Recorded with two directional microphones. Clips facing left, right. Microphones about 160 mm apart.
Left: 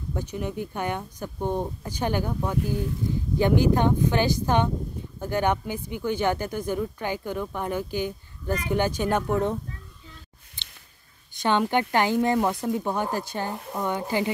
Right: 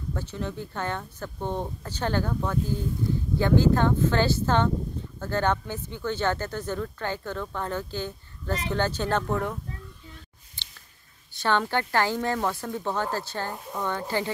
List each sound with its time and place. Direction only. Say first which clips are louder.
0.1 s speech: left 2 dB; 15° left (ahead or behind)
11.3 s speech: left 3 dB; 15° left (ahead or behind)